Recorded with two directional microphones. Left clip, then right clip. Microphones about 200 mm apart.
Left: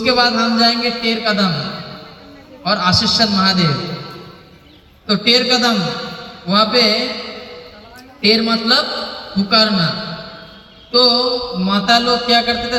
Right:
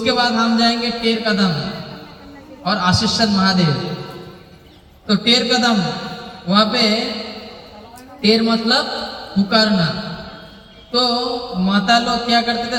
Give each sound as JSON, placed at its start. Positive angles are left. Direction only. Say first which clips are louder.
{"t": 0.0, "sound": "a man's voice", "louder": "left 2 dB", "side_deg": 40}
{"t": 5.0, "sound": "a man's voice", "louder": "left 2 dB", "side_deg": 40}